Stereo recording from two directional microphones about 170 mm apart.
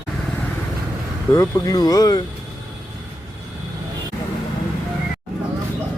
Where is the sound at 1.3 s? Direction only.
20° left (ahead or behind).